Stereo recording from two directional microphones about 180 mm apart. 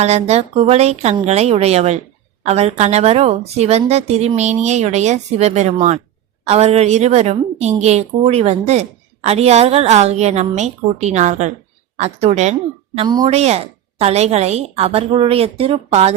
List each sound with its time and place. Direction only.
0.0 s a woman's voice: 35° right (ahead or behind)
13.0 s a woman's voice: 25° right (ahead or behind)
13.3 s a woman's voice: 35° right (ahead or behind)